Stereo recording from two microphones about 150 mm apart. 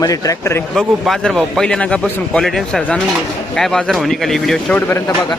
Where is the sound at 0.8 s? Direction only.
5° left (ahead or behind).